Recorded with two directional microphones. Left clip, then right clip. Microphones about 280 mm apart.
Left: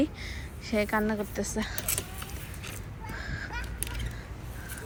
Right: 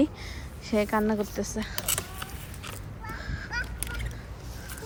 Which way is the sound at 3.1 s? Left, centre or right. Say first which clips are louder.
Left 2 dB; centre.